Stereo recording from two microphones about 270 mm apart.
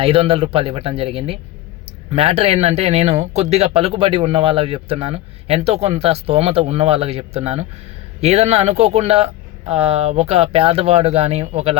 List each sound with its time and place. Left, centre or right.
0.0 s speech: right